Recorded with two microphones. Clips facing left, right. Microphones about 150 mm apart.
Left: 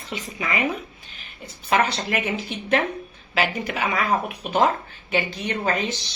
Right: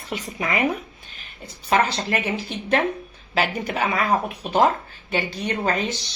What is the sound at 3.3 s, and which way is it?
A woman's voice, 35° right (ahead or behind).